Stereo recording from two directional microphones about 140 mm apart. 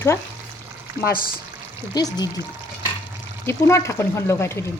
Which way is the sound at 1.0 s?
90° left.